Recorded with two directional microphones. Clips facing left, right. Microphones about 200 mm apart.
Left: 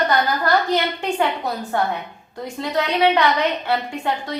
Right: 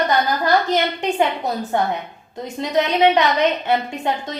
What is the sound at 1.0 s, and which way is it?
A woman's voice, 20° right (ahead or behind).